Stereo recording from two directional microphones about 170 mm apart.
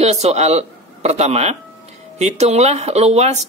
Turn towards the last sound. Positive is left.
turn(degrees=-40)  # may be behind; listen again after turning